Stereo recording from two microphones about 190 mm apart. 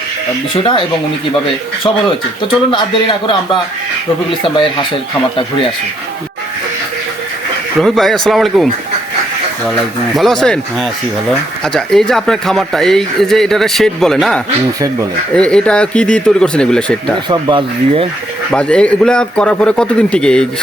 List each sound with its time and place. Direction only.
0.5 s speech: 25° left (ahead or behind)
2.7 s speech: 25° left (ahead or behind)
7.8 s speech: centre (ahead or behind)
10.2 s speech: centre (ahead or behind)
17.2 s speech: 25° right (ahead or behind)
18.5 s speech: 5° left (ahead or behind)